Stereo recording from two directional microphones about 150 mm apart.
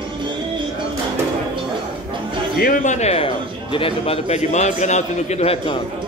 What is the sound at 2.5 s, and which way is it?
Speech, 75° left (ahead or behind).